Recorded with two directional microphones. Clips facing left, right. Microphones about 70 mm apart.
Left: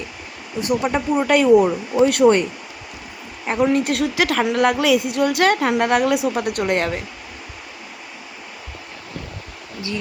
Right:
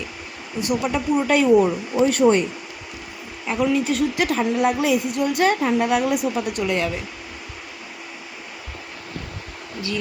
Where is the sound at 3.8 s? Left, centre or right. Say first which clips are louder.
Left 1 dB; left.